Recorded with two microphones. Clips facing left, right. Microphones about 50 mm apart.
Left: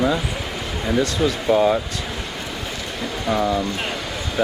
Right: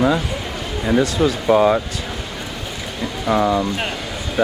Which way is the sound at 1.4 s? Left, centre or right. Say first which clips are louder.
Right 3 dB; centre.